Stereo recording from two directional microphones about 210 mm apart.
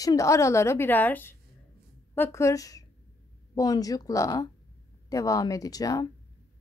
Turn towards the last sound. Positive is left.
turn(degrees=15)  # may be behind; listen again after turning